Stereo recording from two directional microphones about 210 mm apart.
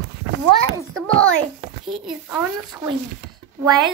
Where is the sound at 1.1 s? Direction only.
90° right.